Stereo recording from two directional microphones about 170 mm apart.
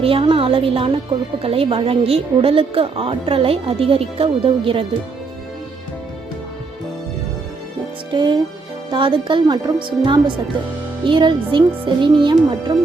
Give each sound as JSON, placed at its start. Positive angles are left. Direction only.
{"t": 0.0, "sound": "a woman's voice", "side_deg": -30}
{"t": 8.1, "sound": "speech", "side_deg": -25}